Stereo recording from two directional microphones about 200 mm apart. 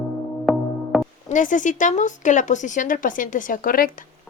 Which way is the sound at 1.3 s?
40° left (ahead or behind).